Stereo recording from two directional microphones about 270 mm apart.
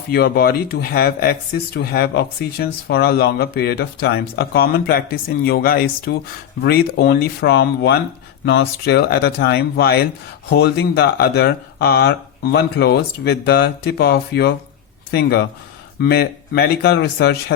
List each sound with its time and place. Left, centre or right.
0.1 s speech: left